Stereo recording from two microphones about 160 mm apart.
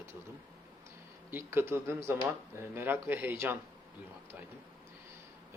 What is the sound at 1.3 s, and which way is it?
Speech, 15° right (ahead or behind).